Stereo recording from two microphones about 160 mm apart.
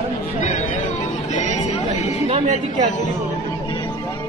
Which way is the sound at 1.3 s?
45° left (ahead or behind).